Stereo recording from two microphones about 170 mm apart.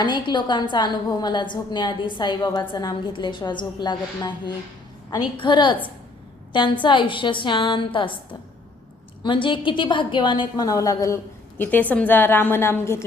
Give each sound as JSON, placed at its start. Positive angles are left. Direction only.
{"t": 0.0, "sound": "a woman's voice", "side_deg": 25}
{"t": 6.8, "sound": "a woman's voice", "side_deg": 30}